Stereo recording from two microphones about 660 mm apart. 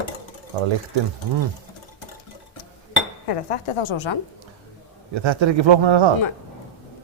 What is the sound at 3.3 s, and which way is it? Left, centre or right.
Speech, left.